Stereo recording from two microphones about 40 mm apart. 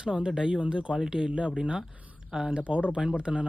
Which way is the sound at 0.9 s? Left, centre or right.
Centre.